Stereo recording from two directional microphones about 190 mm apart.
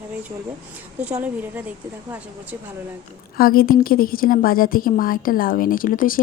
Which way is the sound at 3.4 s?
50° left (ahead or behind).